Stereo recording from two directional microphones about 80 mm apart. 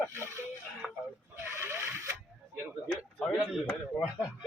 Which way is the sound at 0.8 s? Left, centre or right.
Centre.